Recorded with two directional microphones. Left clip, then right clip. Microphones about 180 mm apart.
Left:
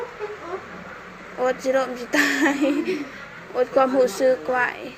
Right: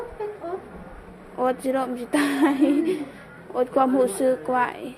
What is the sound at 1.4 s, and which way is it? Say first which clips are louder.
A woman's voice: left 2 dB; 30° right (ahead or behind).